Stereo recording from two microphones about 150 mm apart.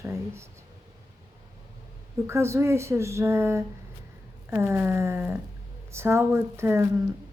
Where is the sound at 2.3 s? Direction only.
20° right (ahead or behind).